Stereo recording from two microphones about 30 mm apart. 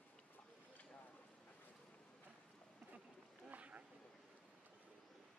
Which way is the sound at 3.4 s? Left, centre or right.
Right.